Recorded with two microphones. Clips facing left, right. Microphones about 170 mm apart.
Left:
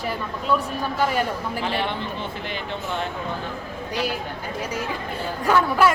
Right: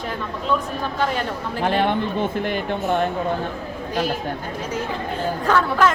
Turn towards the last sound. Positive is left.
turn(degrees=10)  # may be behind; listen again after turning